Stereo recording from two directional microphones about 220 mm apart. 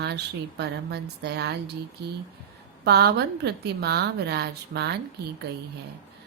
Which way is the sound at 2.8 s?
45° right (ahead or behind).